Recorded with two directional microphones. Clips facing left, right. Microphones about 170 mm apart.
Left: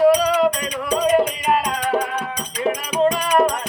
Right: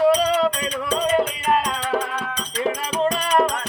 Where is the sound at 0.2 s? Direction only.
25° right (ahead or behind).